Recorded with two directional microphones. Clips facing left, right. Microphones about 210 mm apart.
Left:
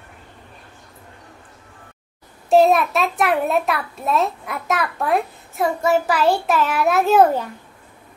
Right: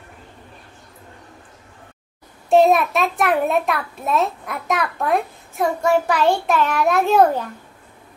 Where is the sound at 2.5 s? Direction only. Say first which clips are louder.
Even; centre (ahead or behind).